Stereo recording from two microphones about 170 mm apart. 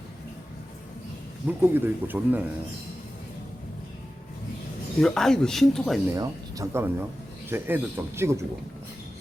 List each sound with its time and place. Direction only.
1.5 s speech: 10° right (ahead or behind)
4.9 s speech: centre (ahead or behind)
6.1 s speech: 15° right (ahead or behind)